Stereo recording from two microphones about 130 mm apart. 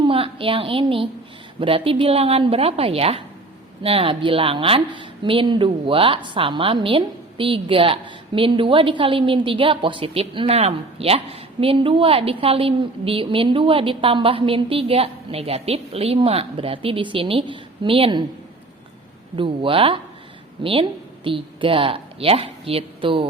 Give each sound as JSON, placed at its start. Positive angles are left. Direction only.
{"t": 0.0, "sound": "a woman's voice", "side_deg": -45}
{"t": 19.4, "sound": "a woman's voice", "side_deg": -45}